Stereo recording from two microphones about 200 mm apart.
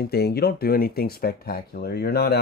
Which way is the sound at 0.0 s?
50° left (ahead or behind).